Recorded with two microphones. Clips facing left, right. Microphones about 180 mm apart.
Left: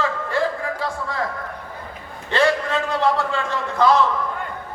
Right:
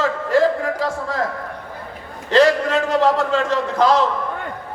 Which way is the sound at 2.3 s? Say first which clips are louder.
Right 5 dB; 40° right (ahead or behind).